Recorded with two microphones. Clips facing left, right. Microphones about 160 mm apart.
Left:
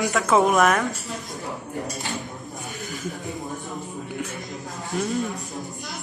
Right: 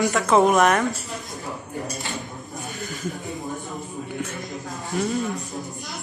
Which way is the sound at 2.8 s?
Centre (ahead or behind).